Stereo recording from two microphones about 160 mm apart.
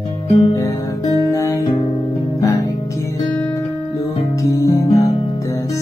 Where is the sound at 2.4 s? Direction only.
20° left (ahead or behind).